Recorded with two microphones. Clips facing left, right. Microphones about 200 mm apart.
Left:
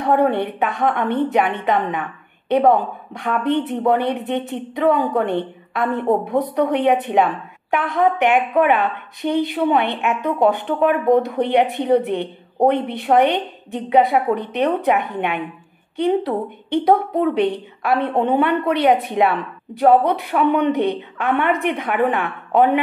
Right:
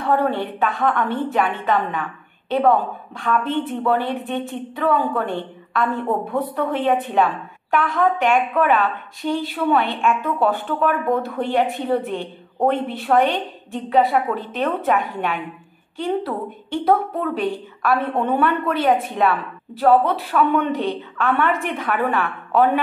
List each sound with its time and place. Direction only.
0.0 s a woman's voice: 20° left (ahead or behind)